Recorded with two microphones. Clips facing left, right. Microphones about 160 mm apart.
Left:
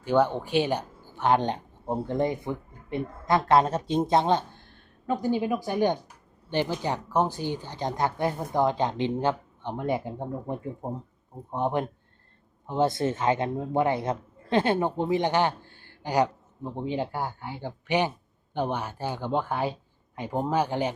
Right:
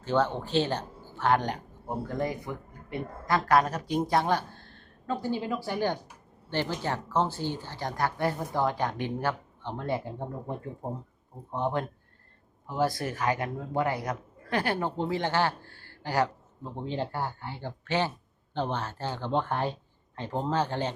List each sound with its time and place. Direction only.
0.0 s a woman's voice: 15° left (ahead or behind)